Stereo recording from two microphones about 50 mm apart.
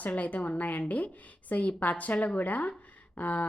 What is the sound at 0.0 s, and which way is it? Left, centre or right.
A woman's voice, left.